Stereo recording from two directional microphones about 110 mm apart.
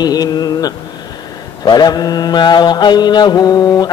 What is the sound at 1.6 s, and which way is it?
Mantra, 40° left (ahead or behind).